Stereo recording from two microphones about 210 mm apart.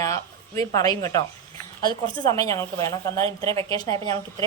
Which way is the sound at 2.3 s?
15° left (ahead or behind).